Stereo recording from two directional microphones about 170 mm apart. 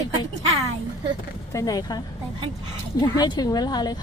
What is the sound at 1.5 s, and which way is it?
Speech, 20° left (ahead or behind).